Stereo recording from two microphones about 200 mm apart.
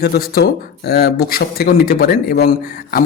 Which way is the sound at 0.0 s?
50° left (ahead or behind).